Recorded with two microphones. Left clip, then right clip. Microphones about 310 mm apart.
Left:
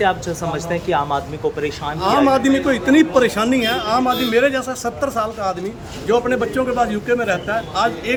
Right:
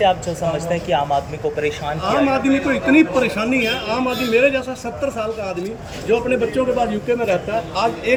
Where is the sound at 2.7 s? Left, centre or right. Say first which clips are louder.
Even; left.